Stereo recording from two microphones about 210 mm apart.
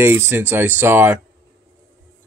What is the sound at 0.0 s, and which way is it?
Speech, 10° right (ahead or behind).